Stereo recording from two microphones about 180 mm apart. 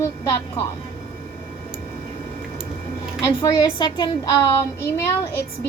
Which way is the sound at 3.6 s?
25° left (ahead or behind).